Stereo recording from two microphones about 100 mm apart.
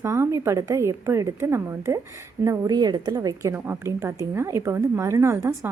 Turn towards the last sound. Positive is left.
turn(degrees=-30)  # may be behind; listen again after turning